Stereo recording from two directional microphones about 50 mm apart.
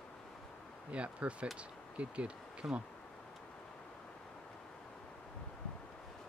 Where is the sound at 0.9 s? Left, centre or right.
Right.